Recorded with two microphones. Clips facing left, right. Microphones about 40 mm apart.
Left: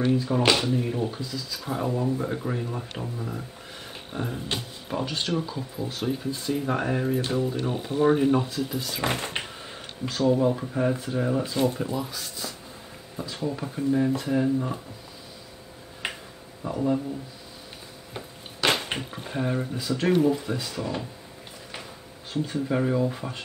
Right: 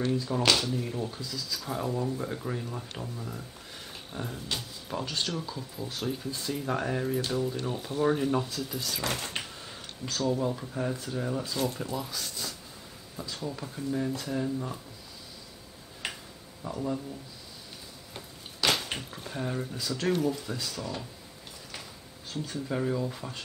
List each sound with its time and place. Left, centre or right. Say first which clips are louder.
0.0 s speech: left 5 dB; left
11.9 s speech: left 4 dB; centre
13.1 s speech: left 6 dB; centre
16.0 s a sound: left 4 dB; left
16.6 s speech: left 5 dB; centre
18.1 s speech: left 7 dB; left
22.3 s speech: left 7 dB; centre